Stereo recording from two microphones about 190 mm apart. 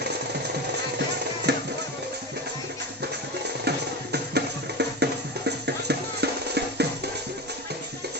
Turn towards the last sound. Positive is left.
turn(degrees=-60)  # may be behind; listen again after turning